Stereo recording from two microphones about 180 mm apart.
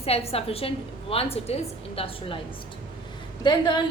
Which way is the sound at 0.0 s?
35° left (ahead or behind).